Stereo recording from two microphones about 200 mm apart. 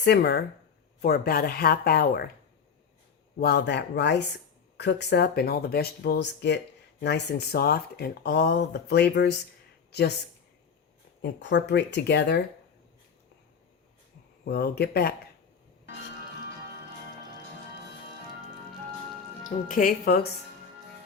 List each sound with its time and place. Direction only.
0.0 s speech: 55° left (ahead or behind)
3.4 s speech: 55° left (ahead or behind)
11.2 s speech: 60° left (ahead or behind)
14.4 s speech: 50° left (ahead or behind)
19.6 s speech: 40° left (ahead or behind)